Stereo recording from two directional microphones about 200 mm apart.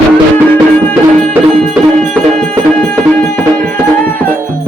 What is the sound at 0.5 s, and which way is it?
Music, 5° left (ahead or behind).